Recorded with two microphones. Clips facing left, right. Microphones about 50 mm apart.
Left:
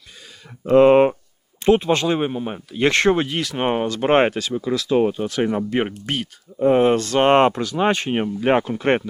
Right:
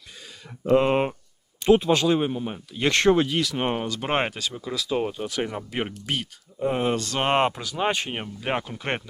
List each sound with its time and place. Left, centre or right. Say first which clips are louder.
0.6 s speech: left 8 dB; centre; by 4.4 s left
4.4 s speech: left 7 dB; centre
7.2 s speech: left 8 dB; centre
8.1 s speech: left 10 dB; centre